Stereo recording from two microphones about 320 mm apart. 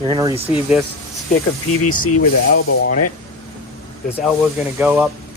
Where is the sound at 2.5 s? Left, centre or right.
Left.